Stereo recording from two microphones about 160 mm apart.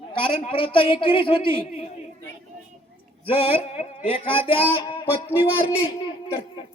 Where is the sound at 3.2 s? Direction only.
35° left (ahead or behind).